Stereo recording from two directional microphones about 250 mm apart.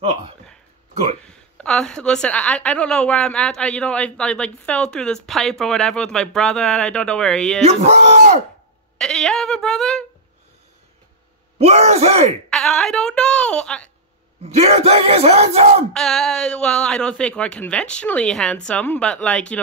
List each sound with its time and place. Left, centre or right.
0.0 s speech: right
1.2 s a woman's voice: centre
7.6 s speech: right
8.9 s a sound: centre
11.5 s speech: right
12.4 s speech: centre
14.4 s speech: right
15.9 s a woman's voice: centre